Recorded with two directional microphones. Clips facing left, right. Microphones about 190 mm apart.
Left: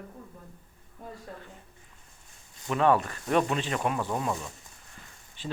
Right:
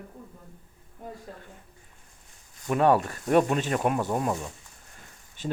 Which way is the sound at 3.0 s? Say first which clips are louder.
Right 4 dB; 45° right (ahead or behind).